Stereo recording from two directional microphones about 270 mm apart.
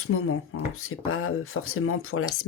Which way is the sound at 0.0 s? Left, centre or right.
Left.